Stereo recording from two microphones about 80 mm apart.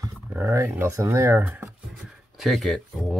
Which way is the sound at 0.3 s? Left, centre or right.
Right.